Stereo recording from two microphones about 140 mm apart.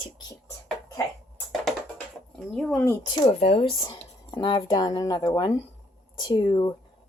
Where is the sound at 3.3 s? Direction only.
45° left (ahead or behind); by 5.6 s 25° left (ahead or behind).